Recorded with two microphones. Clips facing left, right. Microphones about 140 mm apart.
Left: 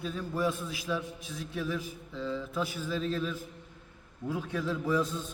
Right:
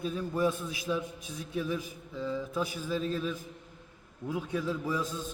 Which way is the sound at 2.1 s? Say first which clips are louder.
Right 1 dB; 10° right (ahead or behind).